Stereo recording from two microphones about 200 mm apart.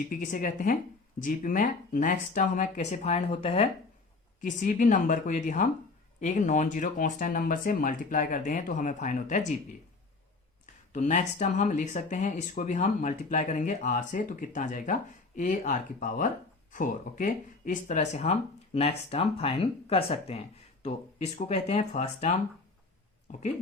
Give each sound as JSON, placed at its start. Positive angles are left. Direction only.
{"t": 0.1, "sound": "a woman's voice", "side_deg": 40}
{"t": 4.4, "sound": "speech", "side_deg": 40}
{"t": 10.9, "sound": "speech", "side_deg": 40}